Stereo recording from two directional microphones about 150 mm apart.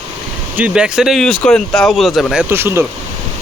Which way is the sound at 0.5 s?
10° right (ahead or behind).